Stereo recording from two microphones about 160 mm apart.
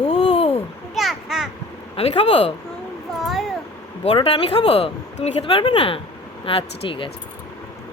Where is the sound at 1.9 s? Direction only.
40° left (ahead or behind).